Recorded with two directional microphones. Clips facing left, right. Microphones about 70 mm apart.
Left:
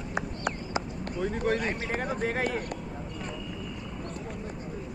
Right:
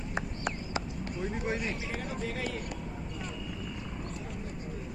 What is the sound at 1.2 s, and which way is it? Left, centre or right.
Speech, left.